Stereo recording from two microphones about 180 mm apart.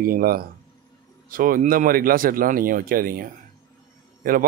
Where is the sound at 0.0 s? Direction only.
50° right (ahead or behind).